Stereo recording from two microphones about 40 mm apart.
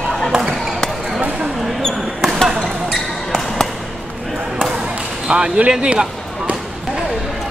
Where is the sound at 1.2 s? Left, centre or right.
Right.